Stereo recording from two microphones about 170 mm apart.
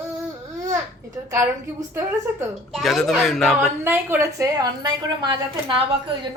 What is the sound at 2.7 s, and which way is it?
Speech, centre (ahead or behind).